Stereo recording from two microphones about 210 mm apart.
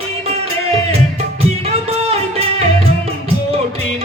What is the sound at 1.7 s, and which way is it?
Music, 30° right (ahead or behind).